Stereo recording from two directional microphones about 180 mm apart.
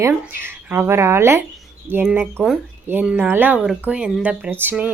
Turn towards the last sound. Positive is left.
turn(degrees=-10)  # may be behind; listen again after turning